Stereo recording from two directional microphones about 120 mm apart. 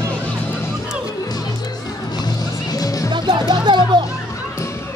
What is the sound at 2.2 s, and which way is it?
Music, 35° left (ahead or behind).